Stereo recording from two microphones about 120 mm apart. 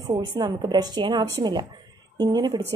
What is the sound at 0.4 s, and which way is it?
A woman's voice, 35° right (ahead or behind).